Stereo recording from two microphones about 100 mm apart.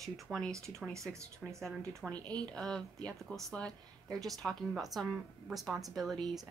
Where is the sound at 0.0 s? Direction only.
5° left (ahead or behind).